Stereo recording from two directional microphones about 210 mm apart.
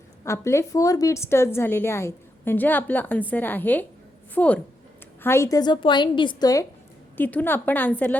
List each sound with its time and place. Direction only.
0.3 s a woman's voice: 15° left (ahead or behind)